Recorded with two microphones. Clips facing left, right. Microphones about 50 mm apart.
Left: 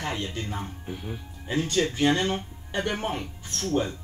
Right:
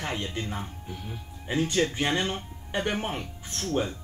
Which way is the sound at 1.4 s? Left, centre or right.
Centre.